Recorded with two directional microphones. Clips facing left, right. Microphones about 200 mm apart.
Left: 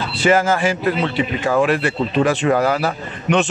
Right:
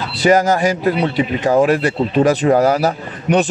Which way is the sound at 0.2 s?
40° right (ahead or behind).